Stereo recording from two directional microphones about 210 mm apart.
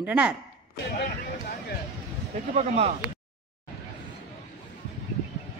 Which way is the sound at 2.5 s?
30° right (ahead or behind).